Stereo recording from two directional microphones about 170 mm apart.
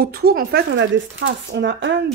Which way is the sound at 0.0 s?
65° right (ahead or behind).